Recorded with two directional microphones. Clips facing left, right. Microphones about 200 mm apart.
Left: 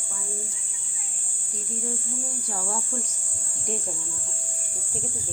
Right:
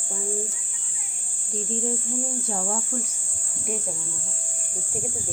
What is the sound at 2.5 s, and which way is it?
Speech, 20° right (ahead or behind).